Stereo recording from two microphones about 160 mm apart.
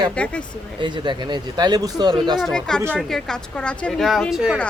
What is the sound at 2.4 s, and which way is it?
Speech, 5° left (ahead or behind).